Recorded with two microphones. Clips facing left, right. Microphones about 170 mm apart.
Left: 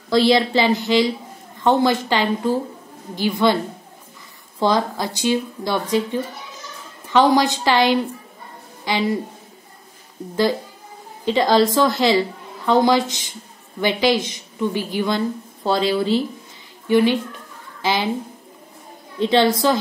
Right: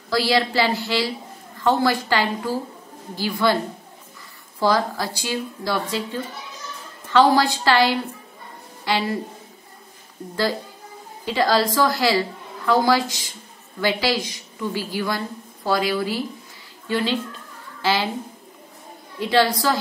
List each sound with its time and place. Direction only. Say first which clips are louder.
0.1 s speech: left 5 dB; 20° left (ahead or behind)
4.6 s speech: left 1 dB; 20° left (ahead or behind)
11.2 s a woman's voice: left 4 dB; 20° left (ahead or behind)
19.1 s speech: left 3 dB; 20° left (ahead or behind)